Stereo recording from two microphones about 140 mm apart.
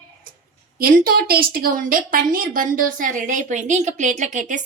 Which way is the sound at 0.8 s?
90° right.